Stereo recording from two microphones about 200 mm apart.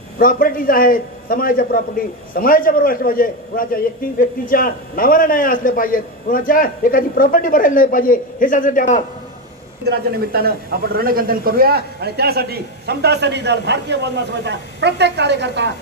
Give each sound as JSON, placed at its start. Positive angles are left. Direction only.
{"t": 0.2, "sound": "a man's voice", "side_deg": 45}
{"t": 9.8, "sound": "a man's voice", "side_deg": -50}